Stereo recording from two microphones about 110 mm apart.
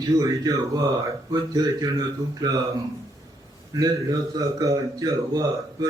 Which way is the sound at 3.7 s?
35° right (ahead or behind).